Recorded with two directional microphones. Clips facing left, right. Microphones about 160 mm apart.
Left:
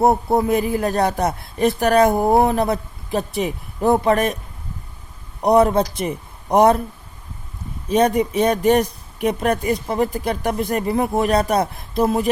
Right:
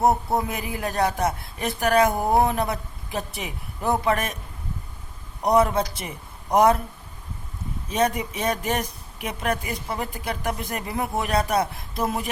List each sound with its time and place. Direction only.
0.0 s speech: 30° left (ahead or behind)
5.4 s a man's voice: 30° left (ahead or behind)
7.9 s speech: 35° left (ahead or behind)